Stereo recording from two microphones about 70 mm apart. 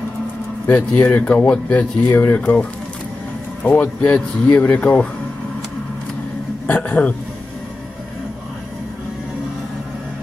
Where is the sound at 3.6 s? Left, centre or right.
Left.